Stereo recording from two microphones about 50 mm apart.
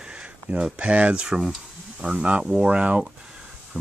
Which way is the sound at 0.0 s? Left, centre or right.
Right.